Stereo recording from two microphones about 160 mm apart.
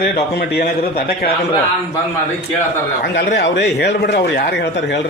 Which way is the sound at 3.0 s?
90° left.